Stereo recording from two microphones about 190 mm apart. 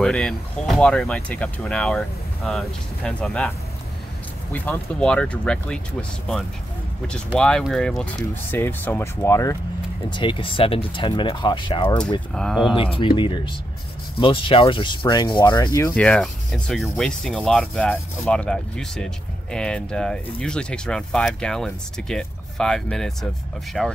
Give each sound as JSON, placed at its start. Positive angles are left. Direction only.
{"t": 0.0, "sound": "sanding", "side_deg": 5}
{"t": 8.5, "sound": "speech", "side_deg": 10}
{"t": 12.4, "sound": "sanding", "side_deg": 0}
{"t": 12.9, "sound": "speech", "side_deg": 25}
{"t": 14.2, "sound": "sanding", "side_deg": 25}